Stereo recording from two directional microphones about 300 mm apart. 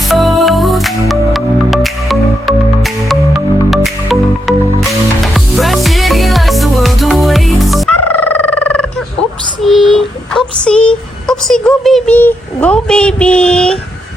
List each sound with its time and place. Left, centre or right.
0.1 s music: centre
8.0 s a sound: centre
9.6 s child singing: centre